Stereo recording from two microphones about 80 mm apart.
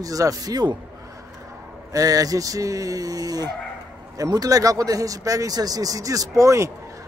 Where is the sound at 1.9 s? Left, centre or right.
Right.